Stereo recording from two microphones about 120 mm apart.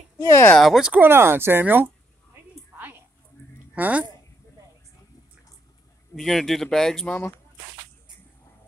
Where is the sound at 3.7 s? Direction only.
15° right (ahead or behind).